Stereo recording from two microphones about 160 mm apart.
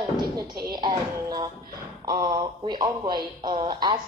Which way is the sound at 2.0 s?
30° right (ahead or behind).